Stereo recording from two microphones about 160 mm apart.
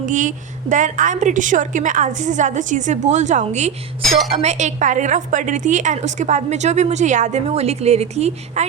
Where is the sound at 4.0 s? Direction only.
Centre (ahead or behind).